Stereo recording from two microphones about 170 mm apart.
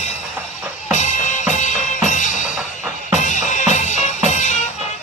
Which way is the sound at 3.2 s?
45° left (ahead or behind).